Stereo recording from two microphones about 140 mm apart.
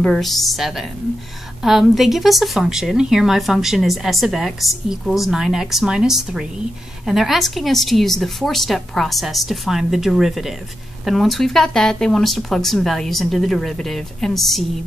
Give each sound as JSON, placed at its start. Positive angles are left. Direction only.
{"t": 0.0, "sound": "a woman's voice", "side_deg": 0}